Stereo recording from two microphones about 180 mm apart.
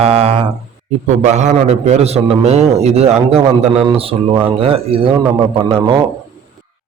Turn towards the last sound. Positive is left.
turn(degrees=-25)  # may be behind; listen again after turning